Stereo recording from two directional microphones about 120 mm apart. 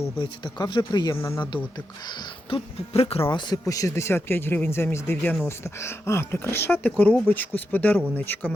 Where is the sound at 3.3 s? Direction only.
30° left (ahead or behind).